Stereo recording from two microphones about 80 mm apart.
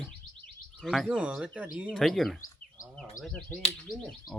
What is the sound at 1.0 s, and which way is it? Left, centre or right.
Speech, centre.